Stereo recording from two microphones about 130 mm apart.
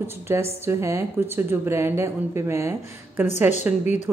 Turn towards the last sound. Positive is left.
turn(degrees=-15)  # may be behind; listen again after turning